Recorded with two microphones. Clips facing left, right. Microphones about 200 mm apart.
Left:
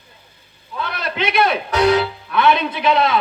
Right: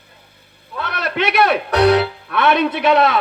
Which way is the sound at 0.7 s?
65° right (ahead or behind).